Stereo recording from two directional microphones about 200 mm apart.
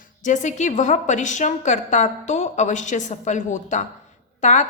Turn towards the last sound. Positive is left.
turn(degrees=35)  # may be behind; listen again after turning